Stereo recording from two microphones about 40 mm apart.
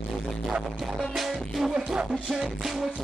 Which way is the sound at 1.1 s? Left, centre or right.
Centre.